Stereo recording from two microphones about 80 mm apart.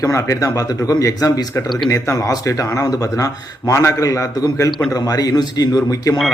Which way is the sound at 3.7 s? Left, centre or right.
Left.